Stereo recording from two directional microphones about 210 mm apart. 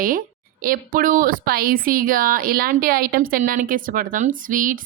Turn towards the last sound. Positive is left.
turn(degrees=-40)  # may be behind; listen again after turning